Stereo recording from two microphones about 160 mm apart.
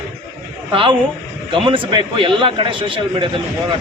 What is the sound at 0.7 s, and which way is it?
A man's voice, 35° right (ahead or behind).